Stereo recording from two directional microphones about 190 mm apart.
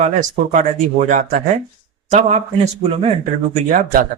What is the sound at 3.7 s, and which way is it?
Speech, 45° right (ahead or behind).